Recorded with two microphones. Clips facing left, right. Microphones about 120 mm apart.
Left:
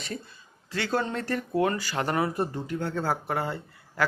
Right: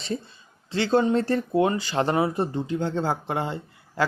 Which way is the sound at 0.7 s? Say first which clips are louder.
Right 7 dB; 25° right (ahead or behind).